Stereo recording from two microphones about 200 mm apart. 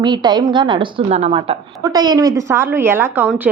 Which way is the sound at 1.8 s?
20° right (ahead or behind).